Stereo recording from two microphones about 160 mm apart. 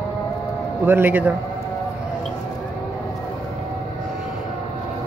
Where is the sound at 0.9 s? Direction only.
10° right (ahead or behind).